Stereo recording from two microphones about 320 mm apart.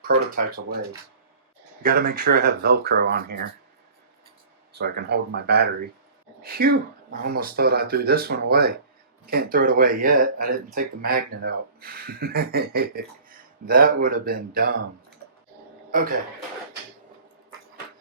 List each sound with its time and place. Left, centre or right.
0.0 s speech: right
1.8 s speech: right
4.7 s speech: right
15.9 s a man's voice: right